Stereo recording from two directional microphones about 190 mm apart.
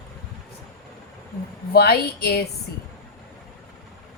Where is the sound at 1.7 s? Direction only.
55° left (ahead or behind).